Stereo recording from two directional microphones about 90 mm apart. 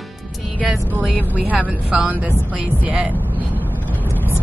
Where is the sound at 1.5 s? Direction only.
15° right (ahead or behind).